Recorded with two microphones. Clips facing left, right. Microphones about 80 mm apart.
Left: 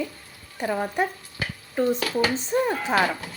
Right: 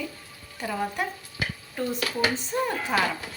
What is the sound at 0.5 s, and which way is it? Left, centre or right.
A woman's voice, left.